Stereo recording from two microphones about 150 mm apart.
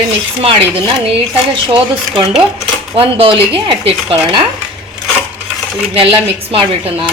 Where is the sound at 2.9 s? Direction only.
35° right (ahead or behind).